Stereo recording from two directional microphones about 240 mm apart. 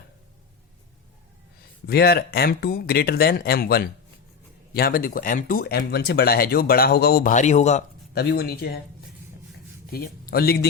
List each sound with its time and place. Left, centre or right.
1.9 s speech: left
8.1 s speech: left
9.9 s speech: left